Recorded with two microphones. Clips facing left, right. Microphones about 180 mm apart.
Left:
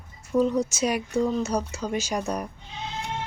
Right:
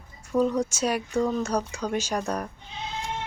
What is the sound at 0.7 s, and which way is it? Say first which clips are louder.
Speech: left 1 dB; 10° left (ahead or behind).